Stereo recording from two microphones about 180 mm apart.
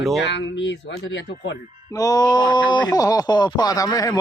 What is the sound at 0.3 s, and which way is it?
Speech, 80° left.